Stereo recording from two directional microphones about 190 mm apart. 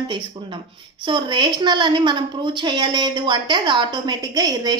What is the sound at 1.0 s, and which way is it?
A woman's voice, 25° right (ahead or behind).